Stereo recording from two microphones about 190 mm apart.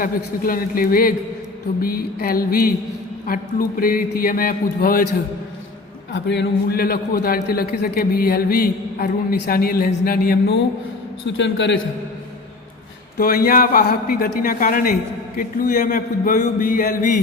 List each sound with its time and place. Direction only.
0.0 s a man's voice: 50° left (ahead or behind)
6.1 s a man's voice: 65° left (ahead or behind)
11.3 s a man's voice: 75° left (ahead or behind)
13.1 s a man's voice: 50° left (ahead or behind)